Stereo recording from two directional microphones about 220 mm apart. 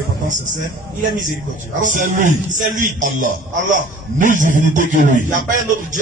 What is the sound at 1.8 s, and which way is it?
A man's voice, 35° right (ahead or behind).